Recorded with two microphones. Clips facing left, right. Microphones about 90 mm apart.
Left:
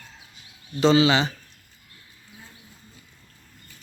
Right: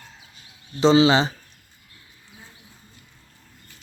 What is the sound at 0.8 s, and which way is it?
Speech, 25° right (ahead or behind).